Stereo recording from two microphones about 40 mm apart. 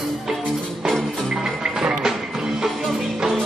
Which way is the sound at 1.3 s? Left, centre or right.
Centre.